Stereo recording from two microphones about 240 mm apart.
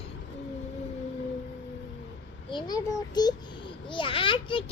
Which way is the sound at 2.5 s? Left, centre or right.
Centre.